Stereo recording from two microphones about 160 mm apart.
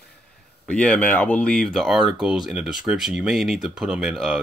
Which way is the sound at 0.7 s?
5° left (ahead or behind).